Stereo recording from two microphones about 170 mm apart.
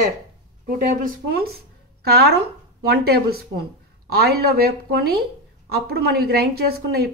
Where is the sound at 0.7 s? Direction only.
55° right (ahead or behind).